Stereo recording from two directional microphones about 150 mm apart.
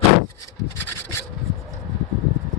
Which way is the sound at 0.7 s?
15° left (ahead or behind).